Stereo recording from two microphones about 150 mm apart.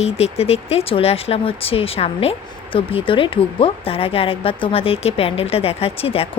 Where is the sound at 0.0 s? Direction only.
45° left (ahead or behind).